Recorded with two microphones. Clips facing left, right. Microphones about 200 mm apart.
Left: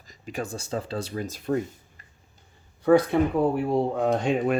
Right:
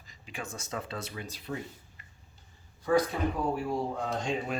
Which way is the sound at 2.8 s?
60° left (ahead or behind).